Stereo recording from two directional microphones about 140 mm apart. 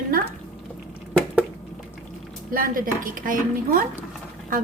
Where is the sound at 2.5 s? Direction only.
85° right.